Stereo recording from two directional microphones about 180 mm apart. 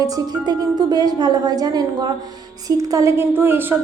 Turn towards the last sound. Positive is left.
turn(degrees=-10)  # may be behind; listen again after turning